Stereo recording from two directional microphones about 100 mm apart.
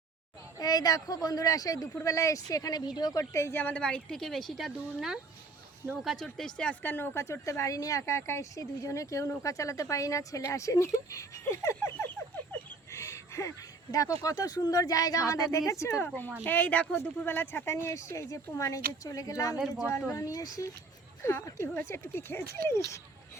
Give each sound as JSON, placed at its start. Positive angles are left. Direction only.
{"t": 0.6, "sound": "speech", "side_deg": 40}
{"t": 3.3, "sound": "a woman's voice", "side_deg": 25}
{"t": 12.9, "sound": "a sound", "side_deg": 30}
{"t": 13.9, "sound": "speech", "side_deg": 35}
{"t": 16.0, "sound": "speech", "side_deg": 15}
{"t": 19.5, "sound": "a woman's voice", "side_deg": -5}
{"t": 19.9, "sound": "speech", "side_deg": 30}